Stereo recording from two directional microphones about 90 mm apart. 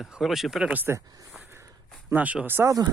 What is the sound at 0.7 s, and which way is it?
Speech, 20° right (ahead or behind).